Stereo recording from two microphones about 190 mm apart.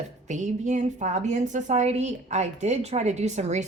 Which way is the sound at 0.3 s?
40° right (ahead or behind).